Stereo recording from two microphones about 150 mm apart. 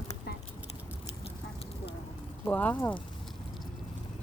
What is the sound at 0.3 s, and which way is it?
Clip-clop, 90° left.